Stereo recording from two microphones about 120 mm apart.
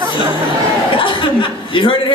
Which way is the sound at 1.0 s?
45° left (ahead or behind).